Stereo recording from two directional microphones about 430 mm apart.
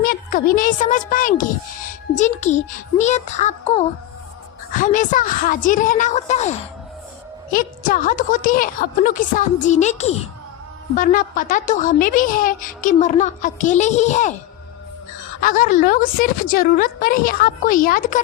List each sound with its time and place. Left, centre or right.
0.0 s a woman's voice: centre
15.4 s a woman's voice: centre